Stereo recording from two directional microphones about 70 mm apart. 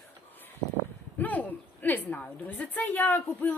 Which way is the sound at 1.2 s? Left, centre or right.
Left.